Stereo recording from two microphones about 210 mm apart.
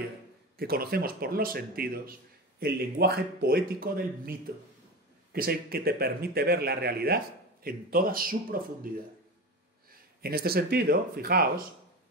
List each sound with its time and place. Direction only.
0.6 s speech: 45° right (ahead or behind)